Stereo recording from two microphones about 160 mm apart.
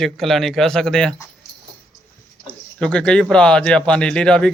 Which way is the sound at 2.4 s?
5° left (ahead or behind).